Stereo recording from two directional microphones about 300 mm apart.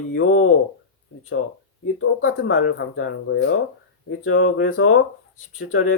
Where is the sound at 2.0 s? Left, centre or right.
Left.